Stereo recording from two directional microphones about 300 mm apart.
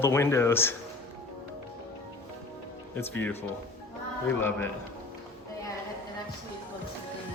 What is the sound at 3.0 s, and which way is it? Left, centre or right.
Speech, centre.